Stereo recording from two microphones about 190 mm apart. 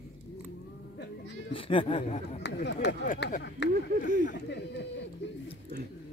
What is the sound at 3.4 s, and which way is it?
Speech, 65° left (ahead or behind).